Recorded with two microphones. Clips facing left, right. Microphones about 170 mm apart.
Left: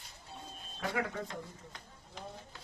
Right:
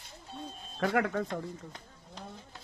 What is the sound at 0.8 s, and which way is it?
Speech, 60° right (ahead or behind).